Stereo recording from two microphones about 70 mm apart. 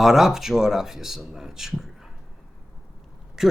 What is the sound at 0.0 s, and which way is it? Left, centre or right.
Speech, centre.